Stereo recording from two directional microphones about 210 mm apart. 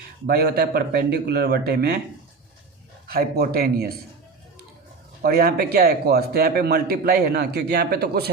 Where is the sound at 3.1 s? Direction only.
45° right (ahead or behind).